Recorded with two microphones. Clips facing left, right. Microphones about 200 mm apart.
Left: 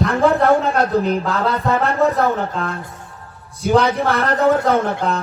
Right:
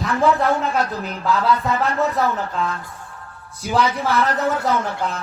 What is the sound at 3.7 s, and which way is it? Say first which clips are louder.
A man's voice: left 3 dB; 55° left (ahead or behind).